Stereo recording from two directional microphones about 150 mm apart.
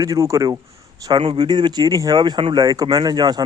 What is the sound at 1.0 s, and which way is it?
Speech, 35° right (ahead or behind).